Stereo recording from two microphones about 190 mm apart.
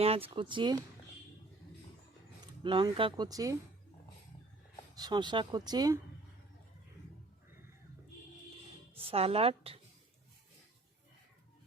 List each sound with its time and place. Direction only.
0.0 s speech: 30° right (ahead or behind)
2.6 s speech: 25° right (ahead or behind)
4.9 s speech: 20° right (ahead or behind)
9.0 s speech: 30° right (ahead or behind)